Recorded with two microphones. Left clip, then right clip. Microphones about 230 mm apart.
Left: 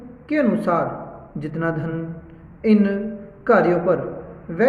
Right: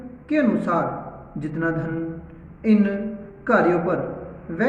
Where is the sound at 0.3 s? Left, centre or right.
Left.